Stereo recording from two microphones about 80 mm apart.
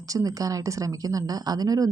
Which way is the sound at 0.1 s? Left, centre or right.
Right.